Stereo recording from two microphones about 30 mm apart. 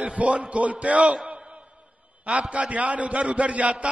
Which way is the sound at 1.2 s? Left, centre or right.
Right.